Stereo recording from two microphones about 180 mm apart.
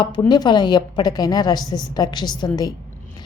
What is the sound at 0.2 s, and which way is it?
A woman's voice, 25° left (ahead or behind).